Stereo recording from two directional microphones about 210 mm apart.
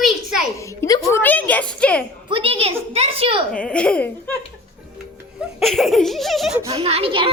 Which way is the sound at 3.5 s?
5° left (ahead or behind).